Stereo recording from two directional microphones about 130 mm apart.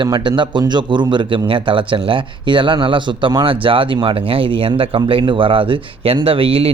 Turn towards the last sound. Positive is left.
turn(degrees=-45)  # may be behind; listen again after turning